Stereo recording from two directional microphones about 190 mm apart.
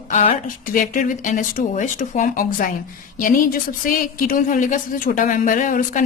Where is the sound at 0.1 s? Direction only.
40° left (ahead or behind).